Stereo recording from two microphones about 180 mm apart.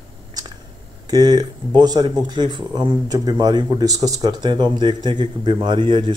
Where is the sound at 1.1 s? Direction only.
20° right (ahead or behind).